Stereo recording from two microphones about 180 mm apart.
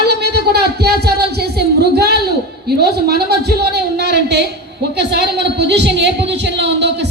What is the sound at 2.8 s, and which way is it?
A woman's voice, 60° right (ahead or behind).